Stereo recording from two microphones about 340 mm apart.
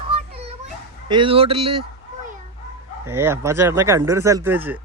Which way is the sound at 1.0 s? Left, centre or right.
Centre.